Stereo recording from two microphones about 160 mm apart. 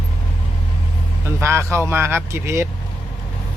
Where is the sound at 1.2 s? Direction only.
15° right (ahead or behind).